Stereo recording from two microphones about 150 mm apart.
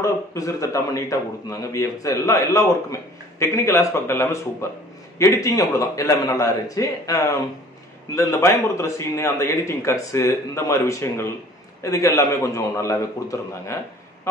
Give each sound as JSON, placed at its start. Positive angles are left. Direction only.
{"t": 0.0, "sound": "a man's voice", "side_deg": 20}